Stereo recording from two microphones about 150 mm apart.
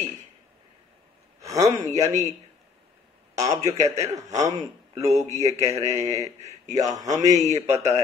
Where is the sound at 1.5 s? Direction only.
20° right (ahead or behind).